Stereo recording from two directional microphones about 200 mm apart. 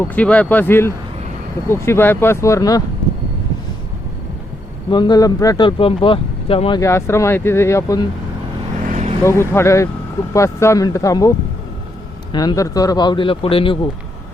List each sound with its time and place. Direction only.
0.0 s speech: 5° left (ahead or behind)
4.9 s speech: 20° left (ahead or behind)
8.9 s vehicle: 35° right (ahead or behind)
9.2 s speech: 15° left (ahead or behind)